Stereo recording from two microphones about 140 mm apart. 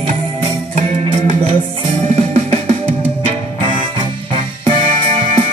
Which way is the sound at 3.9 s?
40° right (ahead or behind).